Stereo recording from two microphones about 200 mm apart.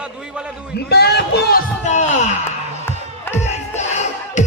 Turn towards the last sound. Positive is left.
turn(degrees=35)  # may be behind; listen again after turning